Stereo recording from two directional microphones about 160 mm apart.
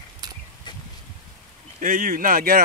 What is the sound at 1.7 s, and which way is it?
Speech, 55° right (ahead or behind).